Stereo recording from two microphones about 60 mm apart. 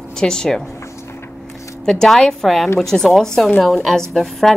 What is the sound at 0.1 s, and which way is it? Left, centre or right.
Speech, centre.